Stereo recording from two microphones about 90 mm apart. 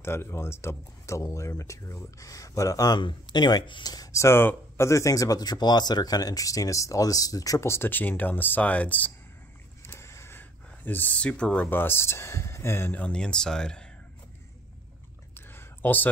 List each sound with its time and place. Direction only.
0.0 s speech: 25° left (ahead or behind)
3.0 s speech: 60° left (ahead or behind); by 9.1 s 15° left (ahead or behind)
9.8 s speech: 30° left (ahead or behind)
13.0 s speech: 10° left (ahead or behind)
15.3 s a sound: 25° left (ahead or behind)